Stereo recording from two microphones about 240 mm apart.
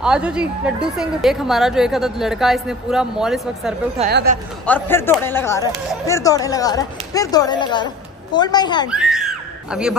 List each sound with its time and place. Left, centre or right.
0.0 s speech: centre
4.1 s speech: right
4.6 s speech: centre
8.9 s a sound: centre